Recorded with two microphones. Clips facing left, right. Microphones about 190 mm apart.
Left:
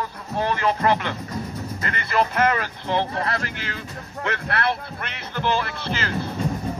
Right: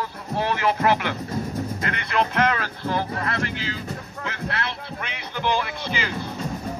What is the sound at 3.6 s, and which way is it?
Speech, 65° left (ahead or behind).